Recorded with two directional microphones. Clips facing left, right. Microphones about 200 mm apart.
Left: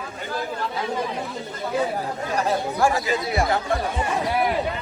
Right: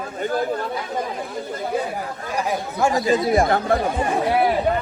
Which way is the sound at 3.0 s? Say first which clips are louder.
Right 6 dB; 40° right (ahead or behind).